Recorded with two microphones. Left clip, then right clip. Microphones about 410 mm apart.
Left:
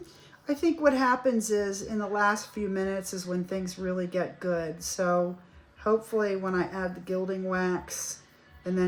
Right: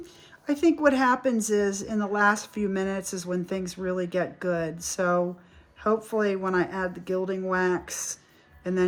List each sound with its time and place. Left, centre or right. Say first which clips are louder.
0.4 s speech: right 3 dB; right